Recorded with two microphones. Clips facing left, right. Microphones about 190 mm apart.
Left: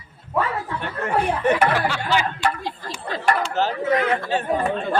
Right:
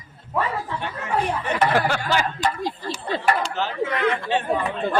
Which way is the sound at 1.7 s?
50° right (ahead or behind).